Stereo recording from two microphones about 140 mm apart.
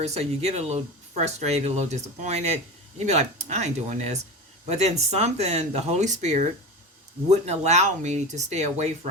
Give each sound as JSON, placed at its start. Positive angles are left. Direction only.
{"t": 0.0, "sound": "speech", "side_deg": -50}